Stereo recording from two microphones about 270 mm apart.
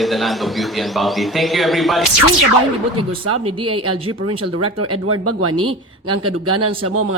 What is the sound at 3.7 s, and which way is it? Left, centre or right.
Speech, right.